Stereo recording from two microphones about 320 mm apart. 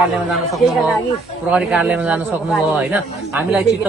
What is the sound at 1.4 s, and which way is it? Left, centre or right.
Speech, centre.